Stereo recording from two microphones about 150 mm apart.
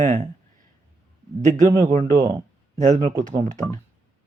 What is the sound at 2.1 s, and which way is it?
Speech, 30° right (ahead or behind).